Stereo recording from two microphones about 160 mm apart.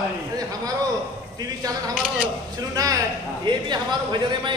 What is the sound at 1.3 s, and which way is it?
Speech, 25° right (ahead or behind).